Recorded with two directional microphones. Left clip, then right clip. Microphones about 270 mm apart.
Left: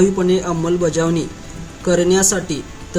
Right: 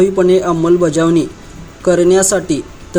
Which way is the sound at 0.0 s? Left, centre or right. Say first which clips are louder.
Right 5 dB; centre.